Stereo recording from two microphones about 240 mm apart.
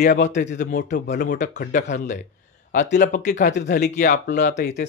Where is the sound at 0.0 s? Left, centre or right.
Left.